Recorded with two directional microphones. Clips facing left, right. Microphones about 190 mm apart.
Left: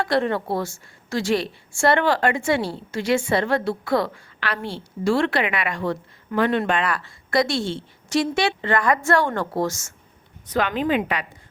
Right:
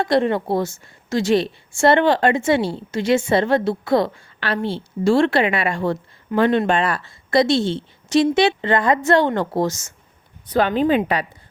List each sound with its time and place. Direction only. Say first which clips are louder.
0.0 s a woman's voice: right 4 dB; 20° right (ahead or behind)
10.5 s a woman's voice: right 5 dB; 30° right (ahead or behind)